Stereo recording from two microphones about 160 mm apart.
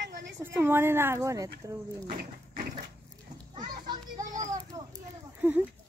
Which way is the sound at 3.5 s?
25° right (ahead or behind).